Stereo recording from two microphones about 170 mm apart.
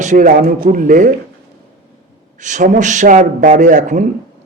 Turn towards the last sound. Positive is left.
turn(degrees=-45)  # may be behind; listen again after turning